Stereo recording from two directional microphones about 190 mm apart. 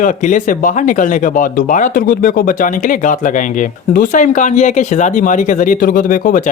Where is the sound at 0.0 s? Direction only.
40° left (ahead or behind).